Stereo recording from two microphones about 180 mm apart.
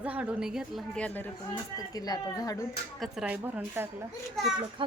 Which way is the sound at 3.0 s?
5° right (ahead or behind).